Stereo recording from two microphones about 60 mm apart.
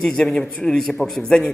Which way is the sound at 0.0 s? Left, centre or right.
Centre.